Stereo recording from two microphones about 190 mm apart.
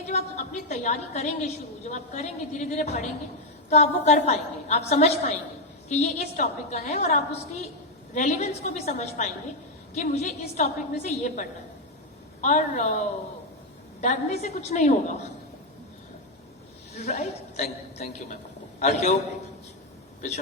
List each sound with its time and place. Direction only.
0.1 s a woman's voice: 35° left (ahead or behind)
17.0 s a woman's voice: 35° left (ahead or behind)